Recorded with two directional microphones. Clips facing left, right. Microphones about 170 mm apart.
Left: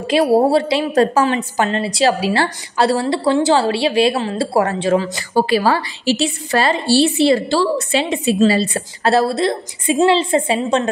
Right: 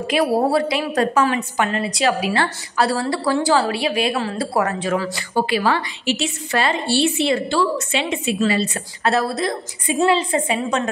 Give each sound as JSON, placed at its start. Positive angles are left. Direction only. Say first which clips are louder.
{"t": 0.0, "sound": "a woman's voice", "louder": "left 5 dB", "side_deg": 30}
{"t": 5.3, "sound": "a woman's voice", "louder": "left 4 dB", "side_deg": 40}